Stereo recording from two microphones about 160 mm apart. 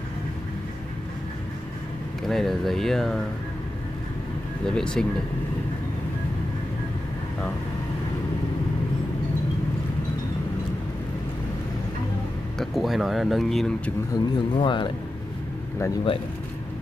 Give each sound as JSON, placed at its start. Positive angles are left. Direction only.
{"t": 2.2, "sound": "speech", "side_deg": 0}
{"t": 4.6, "sound": "speech", "side_deg": 5}
{"t": 12.5, "sound": "speech", "side_deg": 0}
{"t": 14.1, "sound": "speech", "side_deg": 30}